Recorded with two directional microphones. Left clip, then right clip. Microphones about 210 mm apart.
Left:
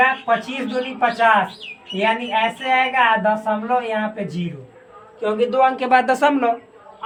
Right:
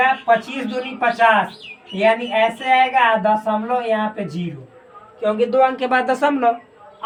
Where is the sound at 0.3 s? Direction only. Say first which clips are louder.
Right 3 dB; 15° left (ahead or behind).